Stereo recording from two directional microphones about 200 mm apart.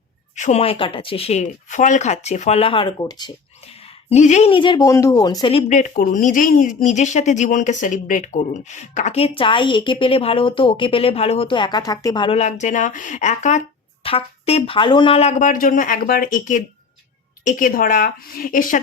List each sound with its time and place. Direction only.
0.3 s speech: 35° left (ahead or behind); by 3.3 s 20° left (ahead or behind)
4.1 s a woman's voice: 35° left (ahead or behind)